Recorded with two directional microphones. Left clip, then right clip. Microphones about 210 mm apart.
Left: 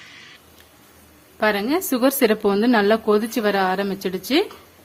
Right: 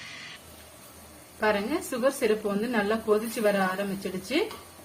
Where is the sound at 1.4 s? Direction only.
55° left (ahead or behind).